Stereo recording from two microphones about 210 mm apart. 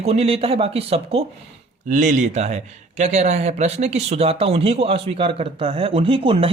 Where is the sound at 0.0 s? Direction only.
30° right (ahead or behind).